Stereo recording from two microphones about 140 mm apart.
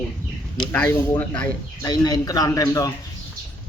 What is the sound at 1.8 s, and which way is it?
A man's voice, 30° left (ahead or behind).